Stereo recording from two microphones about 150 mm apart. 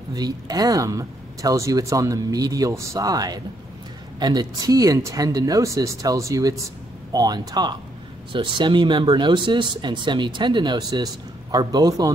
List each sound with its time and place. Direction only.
0.1 s speech: 25° right (ahead or behind)